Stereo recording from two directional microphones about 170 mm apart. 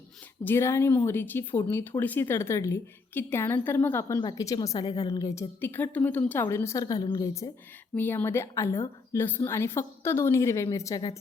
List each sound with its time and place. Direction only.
0.4 s a woman's voice: 15° left (ahead or behind)